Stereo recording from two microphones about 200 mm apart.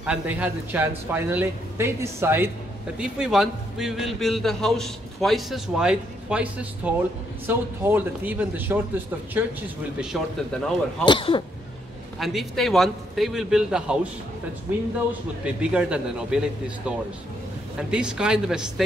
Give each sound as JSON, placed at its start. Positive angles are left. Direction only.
{"t": 0.0, "sound": "speech", "side_deg": -5}
{"t": 9.9, "sound": "speech", "side_deg": 0}
{"t": 11.1, "sound": "speech", "side_deg": 25}
{"t": 12.2, "sound": "speech", "side_deg": 0}
{"t": 15.4, "sound": "speech", "side_deg": -5}